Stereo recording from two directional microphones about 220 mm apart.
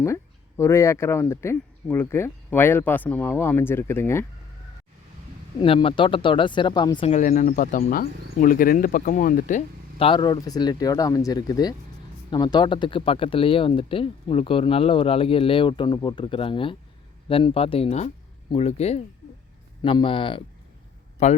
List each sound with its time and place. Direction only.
0.0 s speech: 10° left (ahead or behind)
5.5 s speech: 25° left (ahead or behind)